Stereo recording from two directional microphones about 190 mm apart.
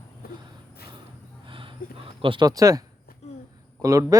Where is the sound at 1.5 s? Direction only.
25° right (ahead or behind).